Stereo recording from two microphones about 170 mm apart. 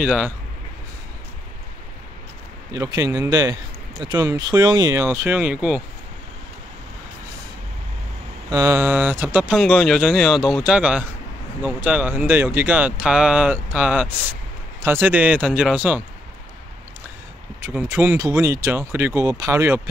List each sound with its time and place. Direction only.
0.0 s speech: 5° right (ahead or behind)
2.7 s speech: 20° right (ahead or behind)
8.5 s speech: 20° right (ahead or behind)
17.6 s speech: 10° right (ahead or behind)